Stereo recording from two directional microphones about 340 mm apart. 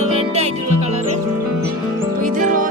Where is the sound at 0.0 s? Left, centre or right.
Centre.